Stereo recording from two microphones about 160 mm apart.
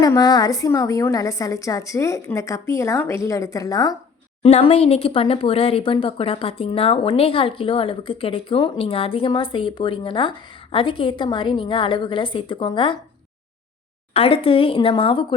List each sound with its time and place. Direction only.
0.0 s a woman's voice: 25° left (ahead or behind)
4.4 s speech: 40° left (ahead or behind)
14.1 s speech: 35° left (ahead or behind)